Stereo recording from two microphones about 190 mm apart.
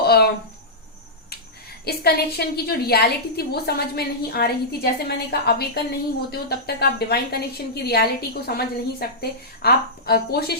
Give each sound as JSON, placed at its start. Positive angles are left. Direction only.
{"t": 0.0, "sound": "speech", "side_deg": 55}
{"t": 1.8, "sound": "a woman's voice", "side_deg": 55}